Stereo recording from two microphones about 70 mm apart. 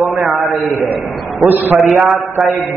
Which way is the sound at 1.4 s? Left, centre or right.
Right.